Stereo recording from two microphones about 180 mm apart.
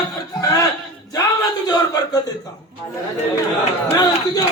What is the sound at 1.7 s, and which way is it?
Speech, 20° left (ahead or behind).